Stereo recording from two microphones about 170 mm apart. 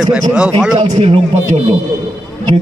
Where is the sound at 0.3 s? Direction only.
5° right (ahead or behind).